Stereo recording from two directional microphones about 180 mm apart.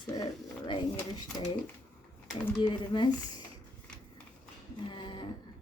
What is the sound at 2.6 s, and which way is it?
Speech, 25° left (ahead or behind).